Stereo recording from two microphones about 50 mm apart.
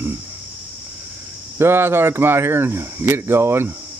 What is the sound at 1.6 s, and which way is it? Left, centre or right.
Speech, right.